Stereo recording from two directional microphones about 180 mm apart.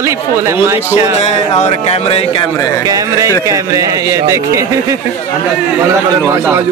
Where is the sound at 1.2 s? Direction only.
35° left (ahead or behind).